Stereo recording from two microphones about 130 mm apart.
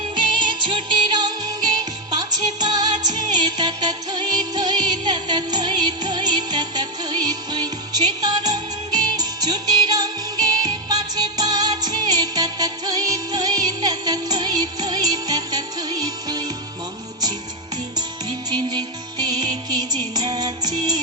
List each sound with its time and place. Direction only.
0.2 s music: 35° right (ahead or behind)
18.3 s music: 35° right (ahead or behind)